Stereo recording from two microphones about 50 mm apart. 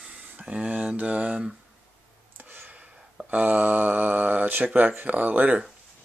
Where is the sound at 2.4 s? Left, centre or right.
Right.